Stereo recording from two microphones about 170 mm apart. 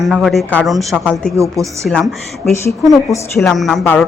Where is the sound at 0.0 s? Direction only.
Centre (ahead or behind).